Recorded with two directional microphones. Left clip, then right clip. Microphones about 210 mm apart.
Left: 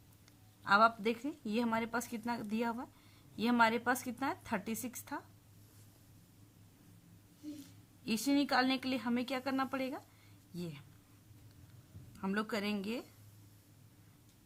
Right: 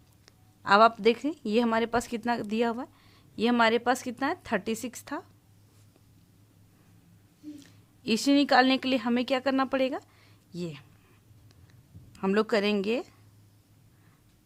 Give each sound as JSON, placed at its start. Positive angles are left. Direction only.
{"t": 0.3, "sound": "speech", "side_deg": -40}
{"t": 8.0, "sound": "speech", "side_deg": -40}
{"t": 12.1, "sound": "speech", "side_deg": -40}